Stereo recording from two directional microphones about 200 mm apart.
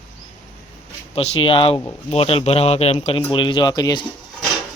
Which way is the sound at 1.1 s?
25° left (ahead or behind).